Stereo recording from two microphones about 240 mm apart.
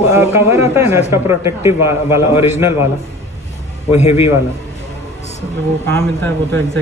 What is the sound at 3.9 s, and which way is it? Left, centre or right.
Speech, left.